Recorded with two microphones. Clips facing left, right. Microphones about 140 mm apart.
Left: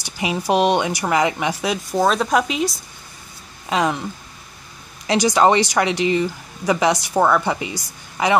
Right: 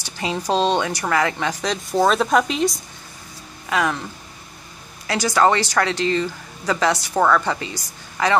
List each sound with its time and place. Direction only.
0.0 s speech: 15° left (ahead or behind)
3.6 s speech: 20° left (ahead or behind)